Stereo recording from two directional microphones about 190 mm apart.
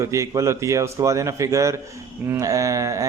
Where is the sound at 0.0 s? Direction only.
15° right (ahead or behind).